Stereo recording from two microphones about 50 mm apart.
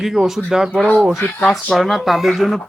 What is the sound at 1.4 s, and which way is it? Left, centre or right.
Speech, centre.